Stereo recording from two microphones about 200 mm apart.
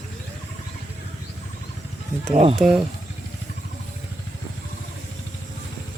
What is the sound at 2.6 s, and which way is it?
Speech, 5° right (ahead or behind).